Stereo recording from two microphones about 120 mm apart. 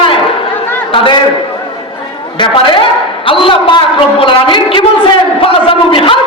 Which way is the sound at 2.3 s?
40° left (ahead or behind).